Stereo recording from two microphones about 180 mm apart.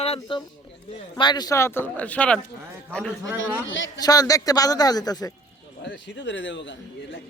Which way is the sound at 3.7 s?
90° left.